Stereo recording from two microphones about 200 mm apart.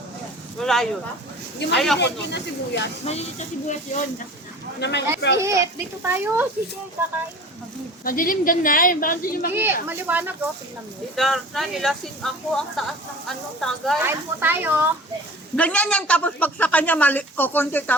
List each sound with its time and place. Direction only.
0.6 s speech: centre (ahead or behind)
2.0 s speech: 60° left (ahead or behind)
3.0 s speech: 30° left (ahead or behind)
4.8 s speech: 60° left (ahead or behind)
5.4 s a child's voice: 15° right (ahead or behind)
8.0 s speech: 45° left (ahead or behind)
9.8 s a child's voice: 10° right (ahead or behind)
14.0 s a child's voice: 10° right (ahead or behind)
15.5 s a woman's voice: 5° left (ahead or behind)